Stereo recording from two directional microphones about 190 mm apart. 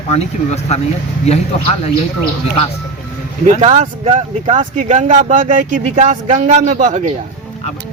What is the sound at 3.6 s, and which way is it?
Speech, 40° right (ahead or behind).